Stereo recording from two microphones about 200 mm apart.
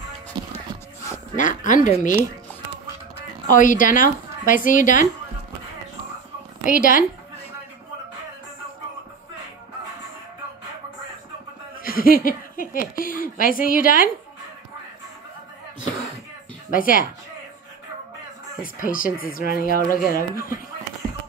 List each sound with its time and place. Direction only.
1.3 s speech: 40° left (ahead or behind)
3.2 s speech: 40° left (ahead or behind)
6.6 s speech: 45° left (ahead or behind)
11.8 s speech: 45° left (ahead or behind)
16.7 s speech: 45° left (ahead or behind)
18.6 s speech: 45° left (ahead or behind)